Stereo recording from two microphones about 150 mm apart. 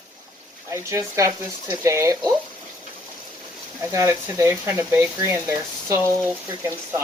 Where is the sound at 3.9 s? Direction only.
20° right (ahead or behind).